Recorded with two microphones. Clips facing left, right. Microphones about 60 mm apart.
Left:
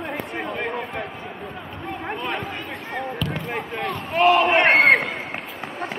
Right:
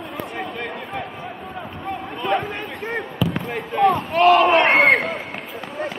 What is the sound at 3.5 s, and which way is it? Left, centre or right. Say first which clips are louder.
Speech: right 9 dB; centre.